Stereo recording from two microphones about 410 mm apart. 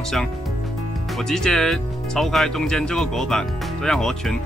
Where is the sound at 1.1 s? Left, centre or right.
Centre.